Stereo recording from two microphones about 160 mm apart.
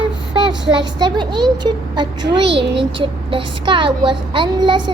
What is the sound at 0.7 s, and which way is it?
A child's voice, 30° right (ahead or behind).